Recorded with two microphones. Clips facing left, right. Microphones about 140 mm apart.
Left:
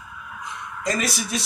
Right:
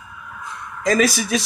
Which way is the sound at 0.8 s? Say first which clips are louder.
Right 8 dB; 90° right.